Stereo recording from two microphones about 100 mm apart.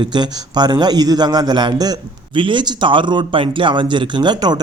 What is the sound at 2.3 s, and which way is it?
Speech, 55° right (ahead or behind).